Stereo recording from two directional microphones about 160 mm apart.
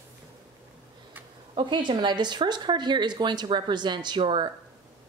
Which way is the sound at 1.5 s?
30° right (ahead or behind).